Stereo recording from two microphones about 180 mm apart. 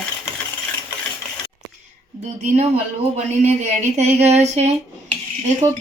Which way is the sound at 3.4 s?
40° right (ahead or behind).